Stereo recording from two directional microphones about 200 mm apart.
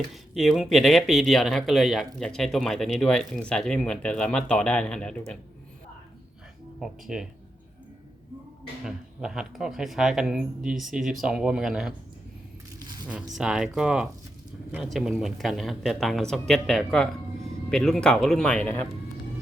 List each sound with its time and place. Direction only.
0.1 s speech: centre (ahead or behind)
6.7 s speech: centre (ahead or behind)
8.8 s speech: 5° right (ahead or behind)
13.3 s speech: 5° right (ahead or behind)